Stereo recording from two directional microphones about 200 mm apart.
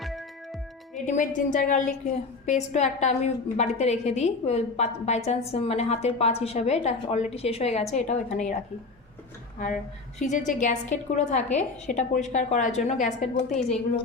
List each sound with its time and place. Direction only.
0.0 s music: centre (ahead or behind)
1.0 s a woman's voice: 40° left (ahead or behind)
10.2 s a woman's voice: 40° left (ahead or behind)